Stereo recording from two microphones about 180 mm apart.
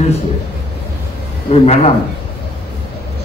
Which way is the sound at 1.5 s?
35° left (ahead or behind).